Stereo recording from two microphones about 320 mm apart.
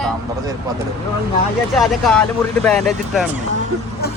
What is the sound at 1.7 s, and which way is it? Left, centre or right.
Speech, centre.